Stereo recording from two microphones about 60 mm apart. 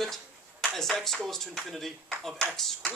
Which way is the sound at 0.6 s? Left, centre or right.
Centre.